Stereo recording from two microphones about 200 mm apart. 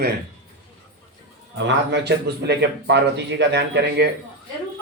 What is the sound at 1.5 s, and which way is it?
A man's voice, 65° right (ahead or behind).